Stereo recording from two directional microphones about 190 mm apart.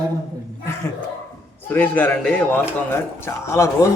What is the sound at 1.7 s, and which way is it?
Speech, 10° left (ahead or behind).